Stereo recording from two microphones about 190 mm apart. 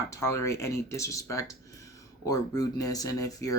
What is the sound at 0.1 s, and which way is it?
Speech, 15° left (ahead or behind).